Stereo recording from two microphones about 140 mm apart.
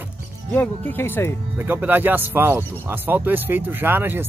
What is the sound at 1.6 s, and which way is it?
Speech, 15° right (ahead or behind).